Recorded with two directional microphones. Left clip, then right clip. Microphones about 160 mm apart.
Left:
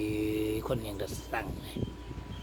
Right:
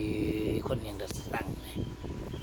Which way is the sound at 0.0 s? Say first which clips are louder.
Left 1 dB; 15° left (ahead or behind).